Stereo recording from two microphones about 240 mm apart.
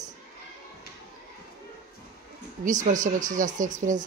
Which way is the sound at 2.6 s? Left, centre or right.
Right.